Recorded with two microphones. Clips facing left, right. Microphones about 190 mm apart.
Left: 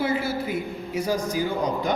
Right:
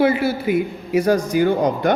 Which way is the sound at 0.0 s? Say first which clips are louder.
Right 8 dB; 65° right (ahead or behind).